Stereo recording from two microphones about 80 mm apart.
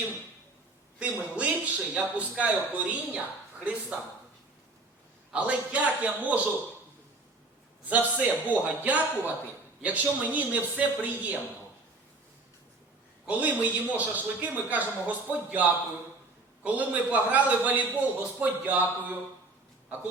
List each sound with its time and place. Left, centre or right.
0.9 s a man's voice: centre
5.3 s a man's voice: centre
7.9 s a man's voice: centre
13.2 s a man's voice: centre